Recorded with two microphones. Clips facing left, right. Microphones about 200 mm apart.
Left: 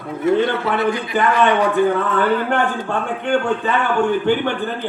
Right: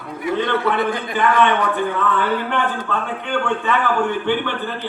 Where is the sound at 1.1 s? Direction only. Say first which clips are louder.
Even; 45° left (ahead or behind).